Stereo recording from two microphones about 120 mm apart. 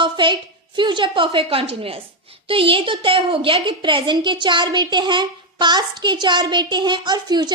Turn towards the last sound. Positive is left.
turn(degrees=-35)  # may be behind; listen again after turning